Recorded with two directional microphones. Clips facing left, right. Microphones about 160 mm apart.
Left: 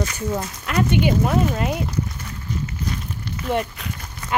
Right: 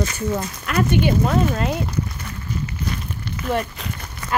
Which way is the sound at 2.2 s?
65° right (ahead or behind).